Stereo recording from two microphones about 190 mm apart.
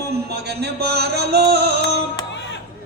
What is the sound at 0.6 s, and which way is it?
Music, 60° right (ahead or behind).